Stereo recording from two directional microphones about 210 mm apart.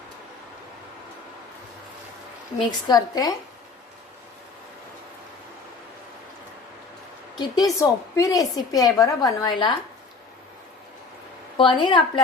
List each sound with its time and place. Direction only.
2.6 s a woman's voice: 20° left (ahead or behind)
7.3 s a woman's voice: 15° left (ahead or behind)
11.5 s a woman's voice: 25° left (ahead or behind)